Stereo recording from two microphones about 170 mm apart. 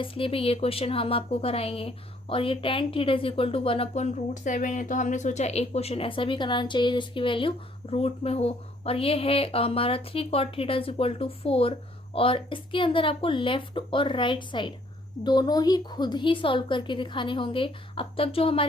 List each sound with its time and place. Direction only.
0.0 s a woman's voice: 30° left (ahead or behind)